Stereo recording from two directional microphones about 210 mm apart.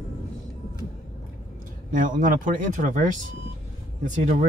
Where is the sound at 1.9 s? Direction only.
40° right (ahead or behind).